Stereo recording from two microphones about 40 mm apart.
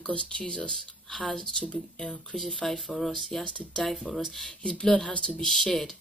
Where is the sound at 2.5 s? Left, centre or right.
Centre.